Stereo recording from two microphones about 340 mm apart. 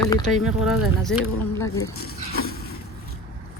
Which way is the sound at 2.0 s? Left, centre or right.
Left.